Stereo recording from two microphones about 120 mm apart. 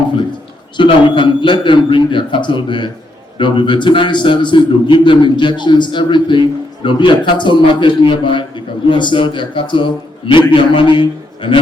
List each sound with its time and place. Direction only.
0.8 s a man's voice: 45° left (ahead or behind)